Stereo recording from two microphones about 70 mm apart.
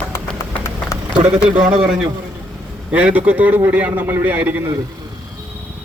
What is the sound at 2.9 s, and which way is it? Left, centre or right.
A man's voice, right.